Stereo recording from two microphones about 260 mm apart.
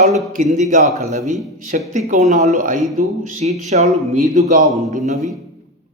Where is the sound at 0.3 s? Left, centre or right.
Right.